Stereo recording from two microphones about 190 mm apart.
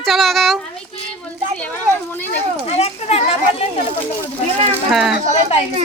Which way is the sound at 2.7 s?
35° left (ahead or behind).